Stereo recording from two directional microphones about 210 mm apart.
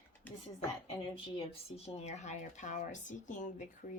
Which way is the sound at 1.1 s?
30° left (ahead or behind).